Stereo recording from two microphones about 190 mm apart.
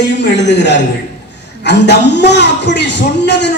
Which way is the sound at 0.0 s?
65° left (ahead or behind).